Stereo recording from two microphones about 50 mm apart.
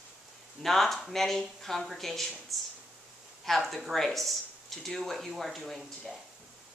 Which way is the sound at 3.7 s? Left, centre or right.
Centre.